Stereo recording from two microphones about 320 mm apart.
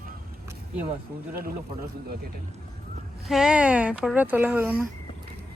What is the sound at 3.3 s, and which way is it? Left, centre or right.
Speech, centre.